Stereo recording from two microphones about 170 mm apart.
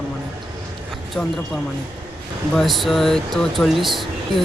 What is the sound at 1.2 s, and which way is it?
Speech, 10° left (ahead or behind).